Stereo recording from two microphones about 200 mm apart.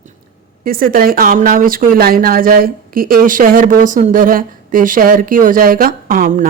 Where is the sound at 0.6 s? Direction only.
45° right (ahead or behind).